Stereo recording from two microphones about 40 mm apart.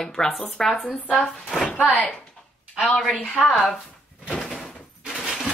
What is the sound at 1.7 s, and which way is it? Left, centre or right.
Speech, left.